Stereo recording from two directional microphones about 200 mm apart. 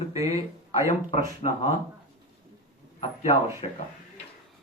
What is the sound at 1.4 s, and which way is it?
Speech, 30° left (ahead or behind).